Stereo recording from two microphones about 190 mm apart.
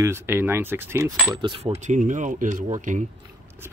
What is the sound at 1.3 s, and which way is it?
Speech, 25° right (ahead or behind).